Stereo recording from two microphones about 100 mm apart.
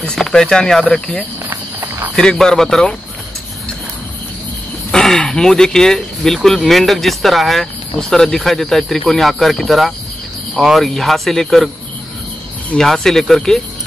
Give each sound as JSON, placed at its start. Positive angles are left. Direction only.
{"t": 0.0, "sound": "speech", "side_deg": 5}
{"t": 1.5, "sound": "cricket", "side_deg": -20}
{"t": 2.1, "sound": "speech", "side_deg": 5}
{"t": 4.9, "sound": "speech", "side_deg": 5}
{"t": 12.7, "sound": "speech", "side_deg": 5}